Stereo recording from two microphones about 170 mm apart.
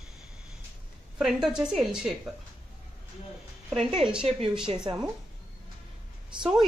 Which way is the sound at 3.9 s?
5° right (ahead or behind).